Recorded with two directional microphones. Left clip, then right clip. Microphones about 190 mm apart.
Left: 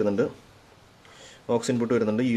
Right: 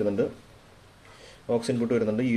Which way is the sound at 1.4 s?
20° left (ahead or behind).